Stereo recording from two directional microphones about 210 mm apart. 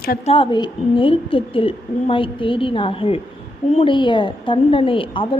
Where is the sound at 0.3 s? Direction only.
25° left (ahead or behind).